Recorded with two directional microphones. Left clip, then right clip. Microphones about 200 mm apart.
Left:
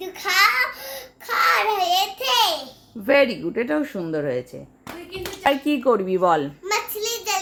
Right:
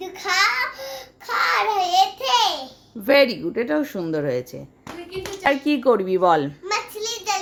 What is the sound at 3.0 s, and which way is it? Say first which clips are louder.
A child's voice: right 1 dB; 5° right (ahead or behind).